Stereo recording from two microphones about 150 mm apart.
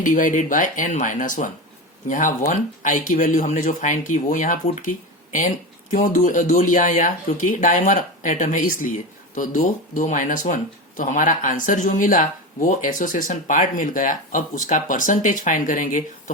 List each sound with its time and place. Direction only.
0.0 s speech: 60° left (ahead or behind)